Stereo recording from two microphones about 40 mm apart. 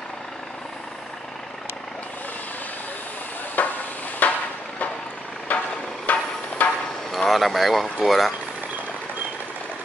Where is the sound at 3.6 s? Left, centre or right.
Left.